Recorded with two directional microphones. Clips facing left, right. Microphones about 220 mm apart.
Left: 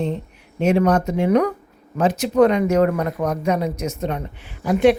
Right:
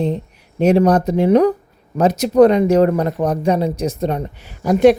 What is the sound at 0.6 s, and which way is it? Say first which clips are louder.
Speech: right 4 dB; 35° right (ahead or behind).